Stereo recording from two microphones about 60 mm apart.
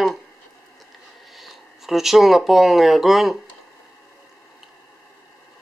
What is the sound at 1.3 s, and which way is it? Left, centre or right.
Speech, centre.